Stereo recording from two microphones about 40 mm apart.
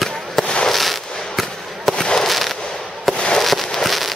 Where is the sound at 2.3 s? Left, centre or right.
Centre.